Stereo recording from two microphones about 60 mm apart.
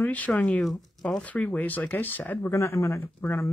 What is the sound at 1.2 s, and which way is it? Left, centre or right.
Speech, left.